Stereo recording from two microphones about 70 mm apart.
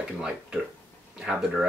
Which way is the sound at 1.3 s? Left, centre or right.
Centre.